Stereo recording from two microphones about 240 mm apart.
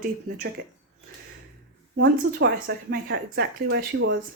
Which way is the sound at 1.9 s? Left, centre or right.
Right.